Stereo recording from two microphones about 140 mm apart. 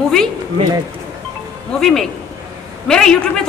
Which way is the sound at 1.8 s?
5° left (ahead or behind).